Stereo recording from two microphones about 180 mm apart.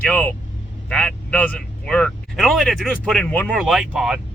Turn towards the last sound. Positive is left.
turn(degrees=0)  # may be behind; listen again after turning